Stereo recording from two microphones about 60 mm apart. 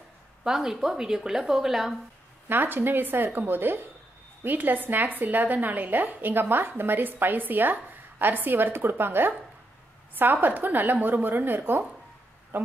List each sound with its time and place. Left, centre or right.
0.4 s speech: centre
2.4 s a woman's voice: right